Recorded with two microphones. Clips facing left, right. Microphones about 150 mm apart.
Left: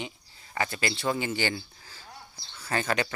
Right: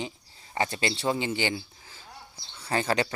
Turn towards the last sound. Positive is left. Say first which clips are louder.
# right 2 dB
turn(degrees=-30)  # may be behind; listen again after turning